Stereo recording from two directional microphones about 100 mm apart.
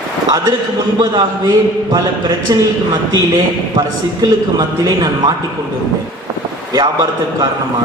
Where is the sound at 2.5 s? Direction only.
40° right (ahead or behind).